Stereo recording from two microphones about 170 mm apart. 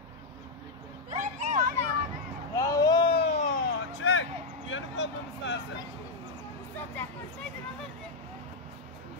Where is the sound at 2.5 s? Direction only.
20° left (ahead or behind).